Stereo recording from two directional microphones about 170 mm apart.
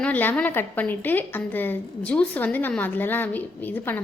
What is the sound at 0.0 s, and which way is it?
A woman's voice, 10° left (ahead or behind).